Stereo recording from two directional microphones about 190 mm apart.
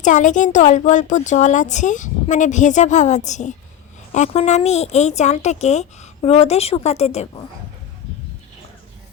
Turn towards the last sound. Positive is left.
turn(degrees=35)  # may be behind; listen again after turning